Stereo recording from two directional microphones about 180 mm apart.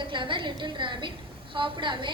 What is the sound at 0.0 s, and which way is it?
A woman's voice, 25° right (ahead or behind).